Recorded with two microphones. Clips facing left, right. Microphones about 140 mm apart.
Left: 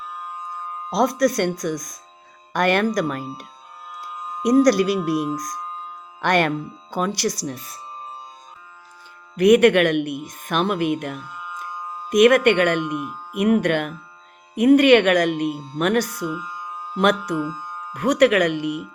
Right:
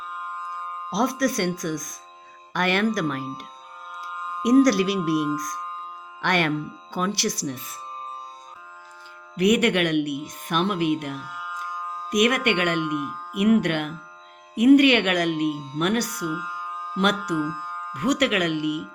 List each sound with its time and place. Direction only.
0.9 s speech: 50° left (ahead or behind)
4.4 s speech: 40° left (ahead or behind)
9.3 s speech: 50° left (ahead or behind)
12.8 s speech: centre (ahead or behind)
13.3 s speech: 45° left (ahead or behind)